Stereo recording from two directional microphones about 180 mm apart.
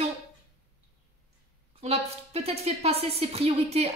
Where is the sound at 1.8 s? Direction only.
35° right (ahead or behind).